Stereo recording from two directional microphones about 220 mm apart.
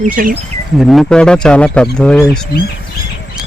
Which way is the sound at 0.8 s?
Centre (ahead or behind).